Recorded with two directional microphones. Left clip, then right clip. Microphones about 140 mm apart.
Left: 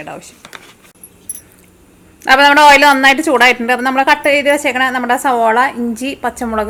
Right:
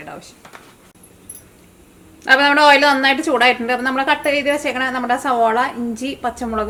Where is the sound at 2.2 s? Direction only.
30° left (ahead or behind).